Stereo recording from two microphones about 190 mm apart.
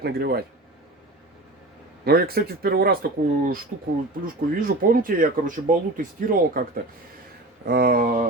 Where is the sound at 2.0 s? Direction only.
55° right (ahead or behind).